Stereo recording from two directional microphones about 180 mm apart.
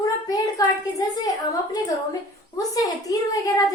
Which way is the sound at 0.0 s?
20° left (ahead or behind).